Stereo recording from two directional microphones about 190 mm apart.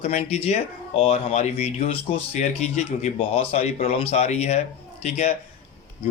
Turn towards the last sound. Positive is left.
turn(degrees=35)  # may be behind; listen again after turning